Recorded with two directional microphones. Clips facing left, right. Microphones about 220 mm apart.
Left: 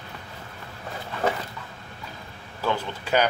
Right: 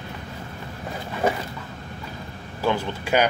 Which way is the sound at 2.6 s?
10° right (ahead or behind).